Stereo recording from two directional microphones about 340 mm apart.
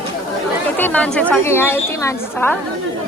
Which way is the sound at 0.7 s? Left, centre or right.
Centre.